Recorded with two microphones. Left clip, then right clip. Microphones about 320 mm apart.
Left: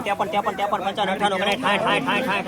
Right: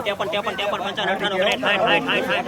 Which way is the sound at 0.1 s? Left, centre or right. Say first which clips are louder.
Left 2 dB; centre.